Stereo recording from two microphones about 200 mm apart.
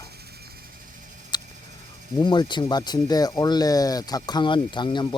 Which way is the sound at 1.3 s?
20° left (ahead or behind).